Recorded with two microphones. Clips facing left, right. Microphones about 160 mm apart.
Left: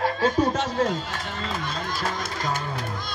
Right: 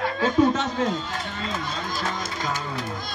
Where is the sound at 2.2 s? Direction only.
55° left (ahead or behind).